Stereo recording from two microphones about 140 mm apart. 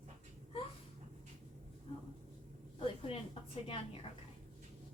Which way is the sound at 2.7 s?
40° left (ahead or behind).